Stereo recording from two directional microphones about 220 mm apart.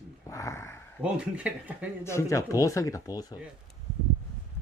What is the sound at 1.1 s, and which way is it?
Speech, 5° right (ahead or behind).